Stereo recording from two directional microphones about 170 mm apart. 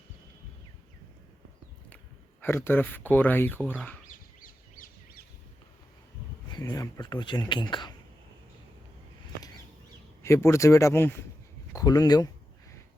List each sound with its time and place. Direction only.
2.4 s speech: 15° left (ahead or behind)
4.4 s bird: 55° left (ahead or behind)
6.5 s speech: 25° left (ahead or behind)
10.2 s speech: 15° left (ahead or behind)